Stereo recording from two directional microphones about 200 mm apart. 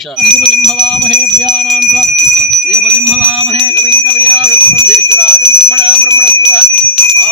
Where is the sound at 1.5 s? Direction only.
Centre (ahead or behind).